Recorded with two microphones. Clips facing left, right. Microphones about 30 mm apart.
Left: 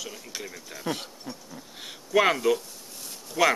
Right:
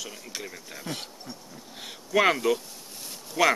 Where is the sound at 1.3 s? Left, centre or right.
Centre.